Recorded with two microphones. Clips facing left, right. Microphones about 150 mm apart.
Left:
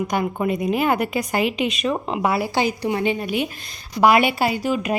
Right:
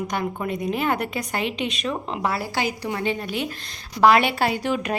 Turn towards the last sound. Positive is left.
turn(degrees=5)  # may be behind; listen again after turning